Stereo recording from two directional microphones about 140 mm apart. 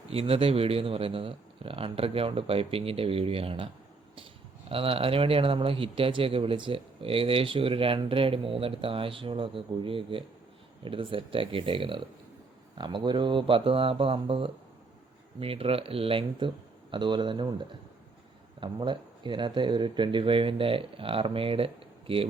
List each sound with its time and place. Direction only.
0.1 s speech: 45° right (ahead or behind)
4.7 s speech: 40° right (ahead or behind)